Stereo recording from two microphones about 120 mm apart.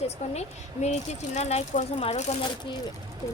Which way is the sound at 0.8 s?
70° left (ahead or behind).